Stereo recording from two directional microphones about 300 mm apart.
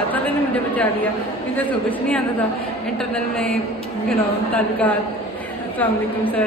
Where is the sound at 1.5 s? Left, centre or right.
Centre.